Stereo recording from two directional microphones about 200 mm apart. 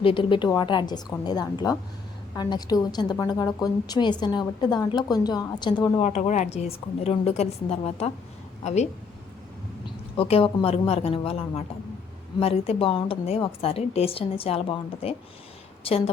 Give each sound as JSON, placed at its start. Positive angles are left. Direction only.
{"t": 0.0, "sound": "a woman's voice", "side_deg": 25}
{"t": 6.0, "sound": "a woman's voice", "side_deg": 35}
{"t": 10.2, "sound": "a woman's voice", "side_deg": 30}